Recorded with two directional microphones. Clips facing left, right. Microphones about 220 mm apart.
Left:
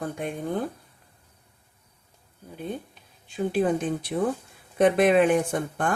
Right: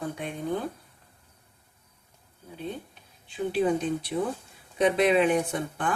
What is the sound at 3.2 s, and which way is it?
Speech, 50° left (ahead or behind).